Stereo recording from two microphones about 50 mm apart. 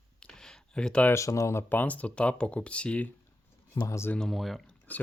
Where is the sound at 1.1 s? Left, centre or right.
Left.